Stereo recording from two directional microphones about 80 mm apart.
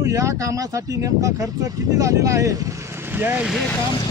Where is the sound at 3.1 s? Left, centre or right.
Right.